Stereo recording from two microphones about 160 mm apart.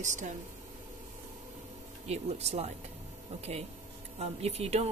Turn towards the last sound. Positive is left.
turn(degrees=-40)  # may be behind; listen again after turning